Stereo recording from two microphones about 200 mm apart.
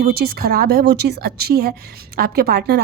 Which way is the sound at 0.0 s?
50° right (ahead or behind).